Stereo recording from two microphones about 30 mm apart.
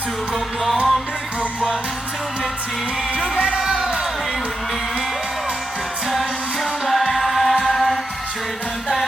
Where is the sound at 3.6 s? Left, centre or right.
Right.